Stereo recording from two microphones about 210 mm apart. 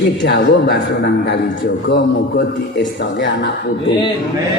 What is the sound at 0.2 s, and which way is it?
A man's voice, 55° left (ahead or behind).